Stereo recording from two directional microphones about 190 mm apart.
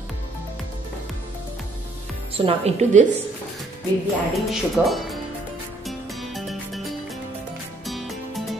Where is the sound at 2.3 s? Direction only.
35° right (ahead or behind).